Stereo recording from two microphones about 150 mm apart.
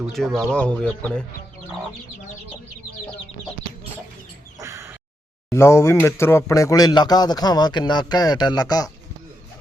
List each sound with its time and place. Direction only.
0.1 s speech: centre (ahead or behind)
4.6 s a sound: 20° right (ahead or behind)
5.5 s speech: 20° left (ahead or behind)